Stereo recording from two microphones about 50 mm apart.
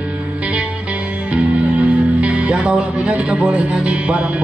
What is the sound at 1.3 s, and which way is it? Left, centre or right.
Speech, right.